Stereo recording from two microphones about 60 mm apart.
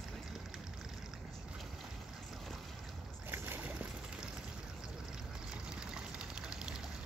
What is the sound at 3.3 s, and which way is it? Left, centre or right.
Boat, right.